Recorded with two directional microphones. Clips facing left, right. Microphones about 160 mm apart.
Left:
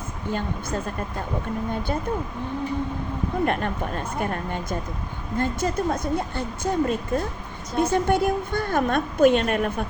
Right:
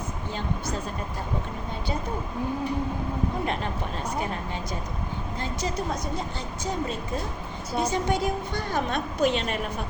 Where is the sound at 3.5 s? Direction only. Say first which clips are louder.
Left 4 dB; 55° left (ahead or behind).